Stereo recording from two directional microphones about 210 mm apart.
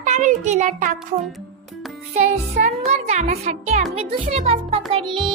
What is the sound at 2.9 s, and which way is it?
Music, 30° right (ahead or behind).